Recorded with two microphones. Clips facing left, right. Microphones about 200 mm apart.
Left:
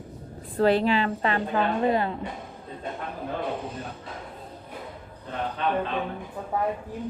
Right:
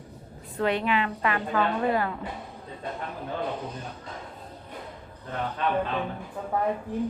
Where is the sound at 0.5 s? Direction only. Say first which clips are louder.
Left 4 dB; 30° left (ahead or behind).